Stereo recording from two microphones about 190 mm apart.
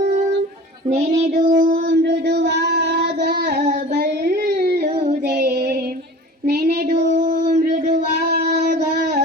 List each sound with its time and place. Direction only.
0.9 s child singing: 35° right (ahead or behind); by 4.8 s 55° right (ahead or behind)
5.4 s female singing: 55° right (ahead or behind)
6.4 s child singing: 55° right (ahead or behind)
7.5 s a sound: 50° right (ahead or behind)